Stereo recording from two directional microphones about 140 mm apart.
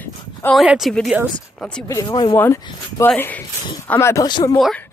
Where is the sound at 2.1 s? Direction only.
35° left (ahead or behind).